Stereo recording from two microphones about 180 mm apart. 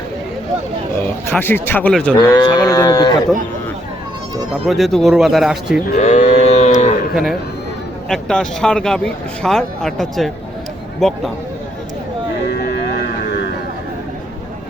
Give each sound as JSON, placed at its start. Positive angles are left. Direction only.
{"t": 1.3, "sound": "speech", "side_deg": 10}
{"t": 2.1, "sound": "a sound", "side_deg": 25}
{"t": 4.5, "sound": "speech", "side_deg": 0}
{"t": 5.9, "sound": "cattle", "side_deg": 40}
{"t": 7.1, "sound": "speech", "side_deg": 0}
{"t": 12.5, "sound": "a sound", "side_deg": 65}